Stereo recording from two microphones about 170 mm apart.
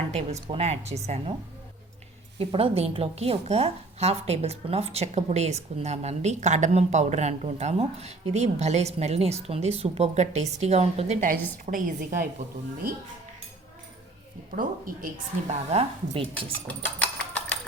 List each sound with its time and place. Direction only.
0.1 s a woman's voice: 40° right (ahead or behind)
2.4 s a woman's voice: 35° right (ahead or behind); by 12.3 s 50° right (ahead or behind)
14.5 s a woman's voice: 55° right (ahead or behind)
16.1 s a woman's voice: 35° right (ahead or behind)
16.6 s a sound: 10° left (ahead or behind)